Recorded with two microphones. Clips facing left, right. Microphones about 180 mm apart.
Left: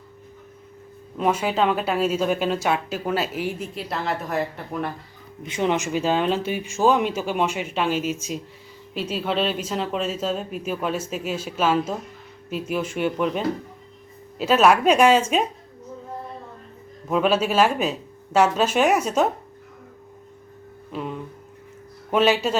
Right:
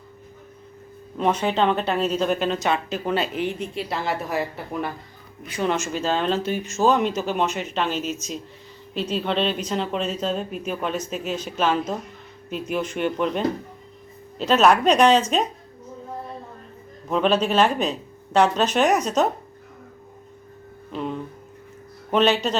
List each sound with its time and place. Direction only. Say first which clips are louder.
1.1 s speech: even; 5° left (ahead or behind)
5.5 s speech: left 2 dB; 20° left (ahead or behind)
17.1 s speech: even; 5° left (ahead or behind)
20.9 s speech: right 2 dB; 5° left (ahead or behind)